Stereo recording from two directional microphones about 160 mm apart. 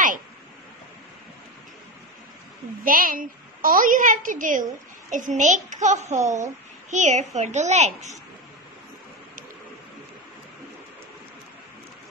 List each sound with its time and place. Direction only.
2.8 s a woman's voice: 60° right (ahead or behind); by 8.1 s 45° right (ahead or behind)